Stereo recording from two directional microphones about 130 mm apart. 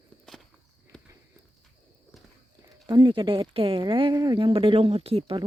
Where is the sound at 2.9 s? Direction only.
35° right (ahead or behind).